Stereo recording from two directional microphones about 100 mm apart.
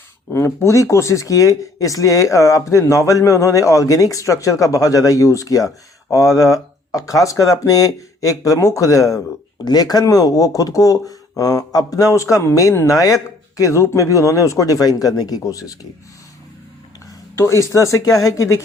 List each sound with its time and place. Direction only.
0.3 s speech: 25° left (ahead or behind)
17.3 s speech: 25° left (ahead or behind)